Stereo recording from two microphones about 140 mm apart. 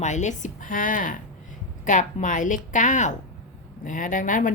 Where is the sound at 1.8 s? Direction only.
65° left (ahead or behind).